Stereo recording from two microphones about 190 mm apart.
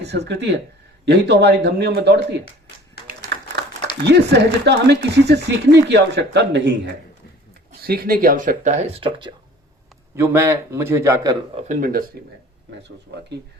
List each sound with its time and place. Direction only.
0.0 s speech: 60° right (ahead or behind)
4.0 s speech: 60° right (ahead or behind)
7.8 s speech: 50° right (ahead or behind); by 9.3 s 25° right (ahead or behind)
10.2 s a man's voice: 15° right (ahead or behind)
11.5 s speech: 45° right (ahead or behind)
13.1 s speech: 60° right (ahead or behind)